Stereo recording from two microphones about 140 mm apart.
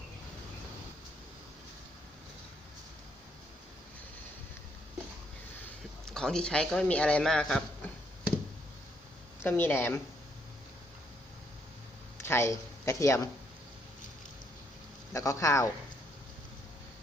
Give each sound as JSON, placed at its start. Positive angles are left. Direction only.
{"t": 5.6, "sound": "speech", "side_deg": 5}
{"t": 9.4, "sound": "speech", "side_deg": 15}
{"t": 12.1, "sound": "speech", "side_deg": 20}
{"t": 15.1, "sound": "speech", "side_deg": 25}